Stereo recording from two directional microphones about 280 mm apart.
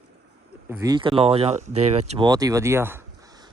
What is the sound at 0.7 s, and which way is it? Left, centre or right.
Speech, centre.